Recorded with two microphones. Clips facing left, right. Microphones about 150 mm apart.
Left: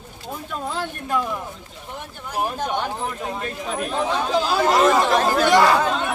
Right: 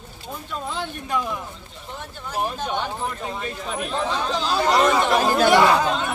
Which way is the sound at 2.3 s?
10° left (ahead or behind).